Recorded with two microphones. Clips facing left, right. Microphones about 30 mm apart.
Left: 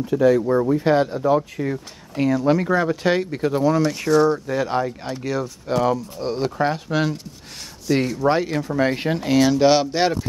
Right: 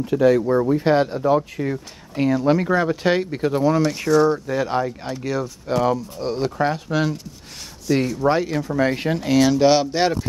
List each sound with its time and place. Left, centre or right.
0.0 s speech: right
0.4 s speech: centre
1.3 s speech: centre
4.2 s speech: centre
6.3 s speech: centre